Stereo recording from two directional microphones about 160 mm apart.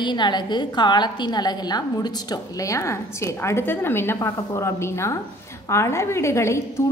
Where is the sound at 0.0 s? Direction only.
30° left (ahead or behind).